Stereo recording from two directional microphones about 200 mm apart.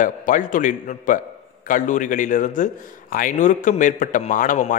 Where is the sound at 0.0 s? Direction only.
40° left (ahead or behind).